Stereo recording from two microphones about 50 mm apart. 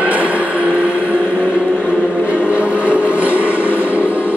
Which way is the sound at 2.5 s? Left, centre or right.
Right.